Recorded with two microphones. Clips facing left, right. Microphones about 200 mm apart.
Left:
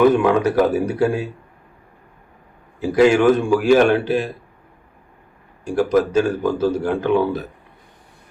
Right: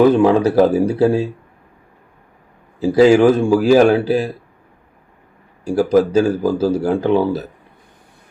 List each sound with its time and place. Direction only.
0.1 s speech: 30° right (ahead or behind)
3.0 s speech: 30° right (ahead or behind)
5.6 s speech: 35° right (ahead or behind)